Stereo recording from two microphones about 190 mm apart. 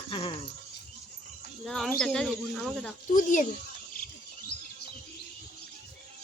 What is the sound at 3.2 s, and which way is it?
Speech, 45° left (ahead or behind).